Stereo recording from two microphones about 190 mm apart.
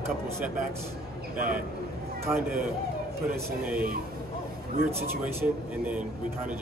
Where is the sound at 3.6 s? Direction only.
50° right (ahead or behind).